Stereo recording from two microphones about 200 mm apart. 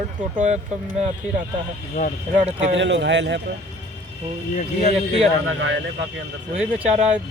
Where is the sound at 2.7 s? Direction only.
65° right (ahead or behind).